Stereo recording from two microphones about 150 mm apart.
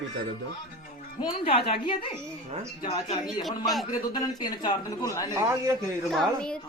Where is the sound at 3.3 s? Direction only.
Centre (ahead or behind).